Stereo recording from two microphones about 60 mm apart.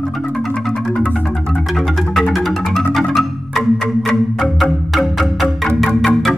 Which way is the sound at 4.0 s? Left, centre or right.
Centre.